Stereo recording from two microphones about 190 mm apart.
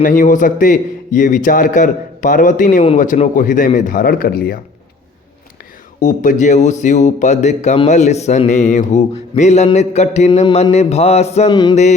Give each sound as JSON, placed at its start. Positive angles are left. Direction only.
{"t": 0.0, "sound": "a man's voice", "side_deg": 45}
{"t": 6.0, "sound": "speech", "side_deg": 40}
{"t": 11.4, "sound": "mantra", "side_deg": 20}
{"t": 11.7, "sound": "speech", "side_deg": 35}